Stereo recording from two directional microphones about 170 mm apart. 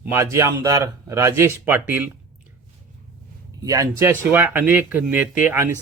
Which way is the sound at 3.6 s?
20° right (ahead or behind).